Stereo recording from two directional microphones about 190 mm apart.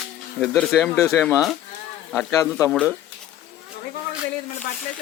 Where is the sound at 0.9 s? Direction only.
15° left (ahead or behind).